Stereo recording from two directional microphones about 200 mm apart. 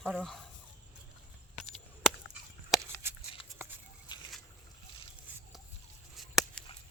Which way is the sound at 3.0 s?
10° right (ahead or behind).